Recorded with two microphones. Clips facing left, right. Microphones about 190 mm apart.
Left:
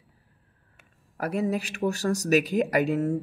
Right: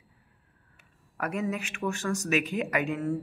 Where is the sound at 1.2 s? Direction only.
35° left (ahead or behind).